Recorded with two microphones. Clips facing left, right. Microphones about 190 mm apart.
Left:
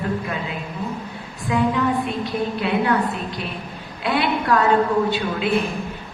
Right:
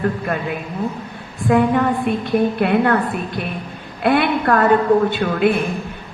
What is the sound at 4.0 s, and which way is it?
A woman's voice, 55° right (ahead or behind).